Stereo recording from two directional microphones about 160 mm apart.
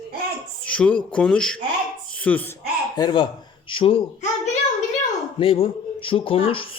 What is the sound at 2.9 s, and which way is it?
Speech, 25° left (ahead or behind).